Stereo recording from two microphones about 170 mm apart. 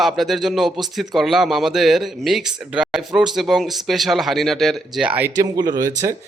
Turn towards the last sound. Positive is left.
turn(degrees=-20)  # may be behind; listen again after turning